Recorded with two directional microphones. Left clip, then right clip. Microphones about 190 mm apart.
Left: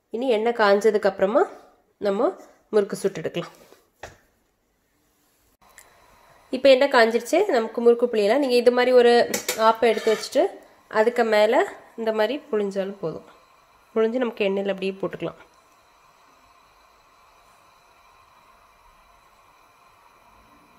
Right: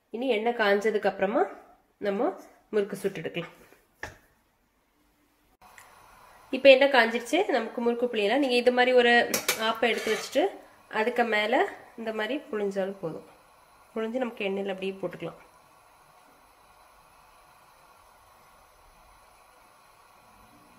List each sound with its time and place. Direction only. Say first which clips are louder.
0.1 s speech: left 5 dB; 40° left (ahead or behind)
6.5 s a woman's voice: left 2 dB; 45° left (ahead or behind)